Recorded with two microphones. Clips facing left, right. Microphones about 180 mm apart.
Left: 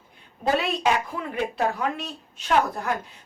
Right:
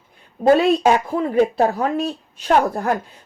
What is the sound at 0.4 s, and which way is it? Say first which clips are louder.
A woman's voice: right 9 dB; 40° right (ahead or behind).